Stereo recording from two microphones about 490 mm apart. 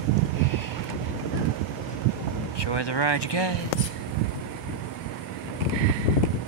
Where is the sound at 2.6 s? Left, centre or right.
Left.